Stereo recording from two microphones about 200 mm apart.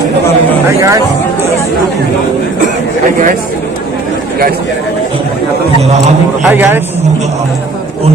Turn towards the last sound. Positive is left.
turn(degrees=-10)  # may be behind; listen again after turning